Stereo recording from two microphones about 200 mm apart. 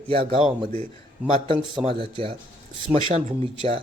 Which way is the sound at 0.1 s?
25° right (ahead or behind).